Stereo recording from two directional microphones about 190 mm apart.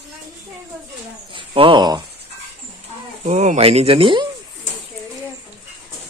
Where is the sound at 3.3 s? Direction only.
35° right (ahead or behind).